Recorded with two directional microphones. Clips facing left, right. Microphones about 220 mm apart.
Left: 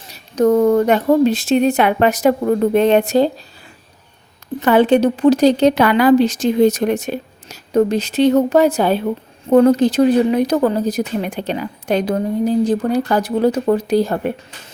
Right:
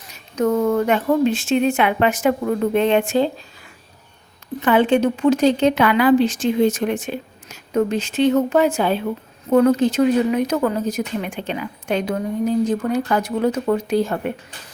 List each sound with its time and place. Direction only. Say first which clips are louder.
0.1 s speech: left 5 dB; 35° left (ahead or behind)
4.6 s speech: left 4 dB; 40° left (ahead or behind)